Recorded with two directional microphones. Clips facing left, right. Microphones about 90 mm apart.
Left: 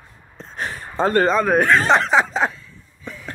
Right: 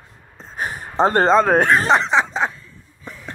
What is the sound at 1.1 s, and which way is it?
Speech, 30° right (ahead or behind).